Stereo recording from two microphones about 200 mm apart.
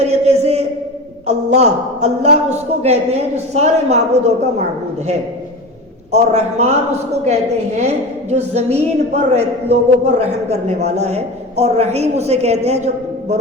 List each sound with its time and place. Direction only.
0.0 s a sound: 35° right (ahead or behind)
1.3 s a woman's voice: 35° right (ahead or behind)
6.1 s a woman's voice: 35° right (ahead or behind)
8.3 s a woman's voice: 35° right (ahead or behind)